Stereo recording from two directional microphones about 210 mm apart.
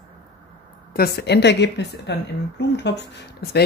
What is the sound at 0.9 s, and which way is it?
Speech, 50° left (ahead or behind).